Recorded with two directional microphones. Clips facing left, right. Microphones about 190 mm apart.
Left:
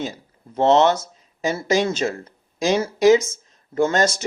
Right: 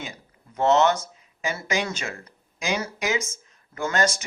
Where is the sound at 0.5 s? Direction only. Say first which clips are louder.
Left 4 dB; 30° left (ahead or behind).